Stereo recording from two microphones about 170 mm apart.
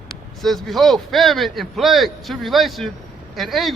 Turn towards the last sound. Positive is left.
turn(degrees=0)  # may be behind; listen again after turning